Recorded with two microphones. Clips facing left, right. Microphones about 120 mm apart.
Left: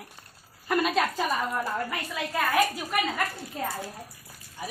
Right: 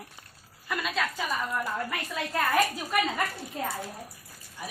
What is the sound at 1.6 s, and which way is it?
A woman's voice, 5° left (ahead or behind).